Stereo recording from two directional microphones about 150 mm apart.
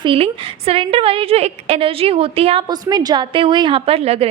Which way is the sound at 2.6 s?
25° right (ahead or behind).